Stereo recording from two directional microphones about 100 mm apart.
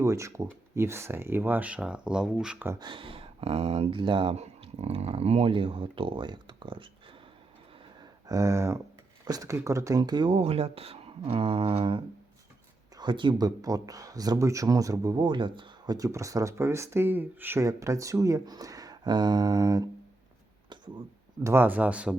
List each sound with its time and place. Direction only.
0.0 s speech: 30° right (ahead or behind); by 2.6 s 5° right (ahead or behind)
2.7 s speech: 55° right (ahead or behind)
4.4 s speech: 90° right; by 6.8 s 55° right (ahead or behind)
8.3 s speech: 35° right (ahead or behind)
10.0 s speech: 50° right (ahead or behind); by 12.0 s 65° right (ahead or behind)
13.0 s speech: 55° right (ahead or behind)
13.6 s speech: 35° right (ahead or behind)
15.2 s speech: 55° right (ahead or behind)
16.0 s speech: 35° right (ahead or behind)
17.6 s speech: 30° right (ahead or behind)
20.7 s a sound: 50° right (ahead or behind)
21.4 s speech: 20° right (ahead or behind)